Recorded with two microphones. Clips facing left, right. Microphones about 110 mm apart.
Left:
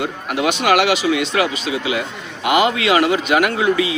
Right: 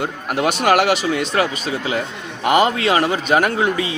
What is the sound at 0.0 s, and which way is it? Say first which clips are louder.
A man's voice: even; 40° right (ahead or behind).